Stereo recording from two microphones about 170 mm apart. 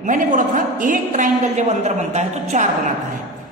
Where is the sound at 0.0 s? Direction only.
50° right (ahead or behind).